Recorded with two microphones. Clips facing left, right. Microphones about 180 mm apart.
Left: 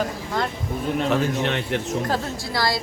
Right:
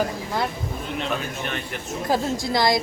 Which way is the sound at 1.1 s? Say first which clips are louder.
Left 6 dB; 80° left.